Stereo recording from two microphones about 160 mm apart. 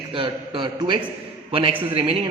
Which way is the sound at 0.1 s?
30° right (ahead or behind).